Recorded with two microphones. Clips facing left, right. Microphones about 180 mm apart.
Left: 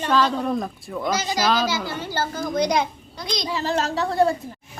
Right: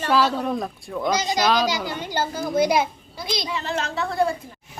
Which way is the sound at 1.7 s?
15° right (ahead or behind).